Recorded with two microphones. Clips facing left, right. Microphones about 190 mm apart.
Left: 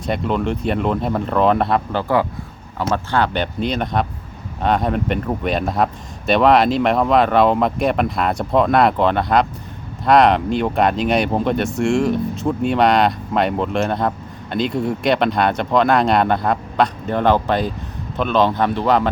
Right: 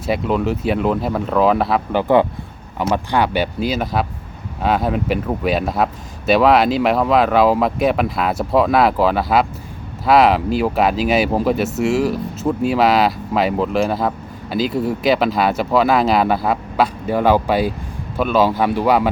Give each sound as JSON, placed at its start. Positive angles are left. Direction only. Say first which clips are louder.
{"t": 0.0, "sound": "speech", "louder": "right 2 dB", "side_deg": -5}
{"t": 1.9, "sound": "speech", "louder": "right 4 dB", "side_deg": -20}